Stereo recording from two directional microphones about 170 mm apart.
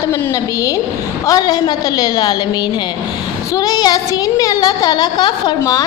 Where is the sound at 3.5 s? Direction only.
25° left (ahead or behind).